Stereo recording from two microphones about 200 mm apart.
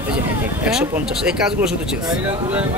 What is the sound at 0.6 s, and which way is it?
A man's voice, 5° right (ahead or behind).